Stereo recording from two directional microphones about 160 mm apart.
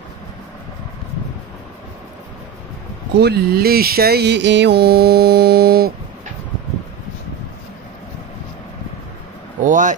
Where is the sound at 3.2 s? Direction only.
80° right.